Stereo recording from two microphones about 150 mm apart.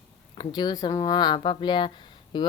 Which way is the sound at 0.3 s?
25° left (ahead or behind).